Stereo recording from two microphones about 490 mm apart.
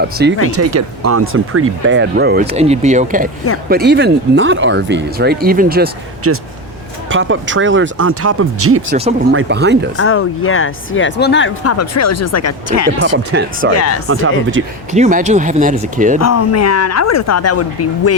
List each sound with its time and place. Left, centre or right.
0.2 s speech: centre
0.5 s speech: right
10.0 s speech: left
13.3 s speech: right
13.7 s speech: left
14.1 s speech: right
14.9 s speech: centre
16.2 s speech: left